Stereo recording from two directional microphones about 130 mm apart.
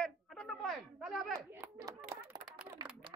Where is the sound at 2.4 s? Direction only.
85° right.